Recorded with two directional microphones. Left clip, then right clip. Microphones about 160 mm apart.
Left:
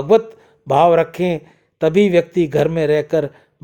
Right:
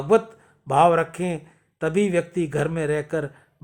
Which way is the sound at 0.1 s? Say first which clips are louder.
Left 5 dB; 25° left (ahead or behind).